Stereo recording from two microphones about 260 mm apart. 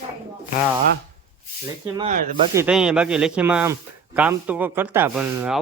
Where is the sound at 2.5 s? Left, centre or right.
Centre.